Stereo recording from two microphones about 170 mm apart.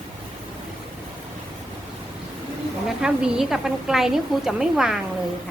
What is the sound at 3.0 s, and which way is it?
A woman's voice, 5° right (ahead or behind).